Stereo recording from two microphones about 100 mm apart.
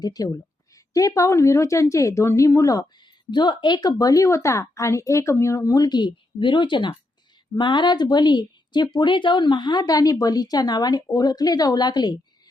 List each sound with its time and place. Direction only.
0.0 s a woman's voice: 40° left (ahead or behind)